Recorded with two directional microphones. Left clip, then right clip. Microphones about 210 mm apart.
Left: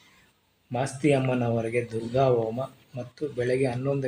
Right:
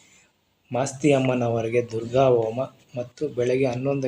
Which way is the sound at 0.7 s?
20° right (ahead or behind).